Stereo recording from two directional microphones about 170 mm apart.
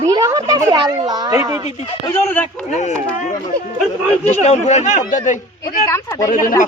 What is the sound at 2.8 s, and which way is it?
Speech, 40° left (ahead or behind).